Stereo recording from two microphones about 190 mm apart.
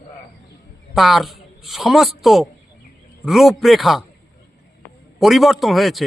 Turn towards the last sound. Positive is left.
turn(degrees=0)  # may be behind; listen again after turning